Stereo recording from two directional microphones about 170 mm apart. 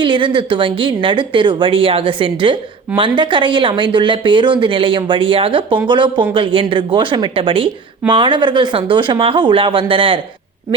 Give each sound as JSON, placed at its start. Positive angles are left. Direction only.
{"t": 0.0, "sound": "a woman's voice", "side_deg": -30}